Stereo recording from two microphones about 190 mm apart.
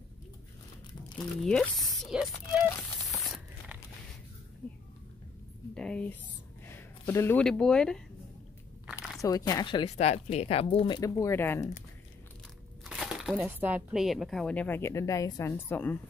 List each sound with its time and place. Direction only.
1.4 s speech: centre (ahead or behind)
3.1 s a sound: centre (ahead or behind)
5.8 s speech: 5° left (ahead or behind)
9.2 s speech: 20° left (ahead or behind)
12.8 s speech: centre (ahead or behind)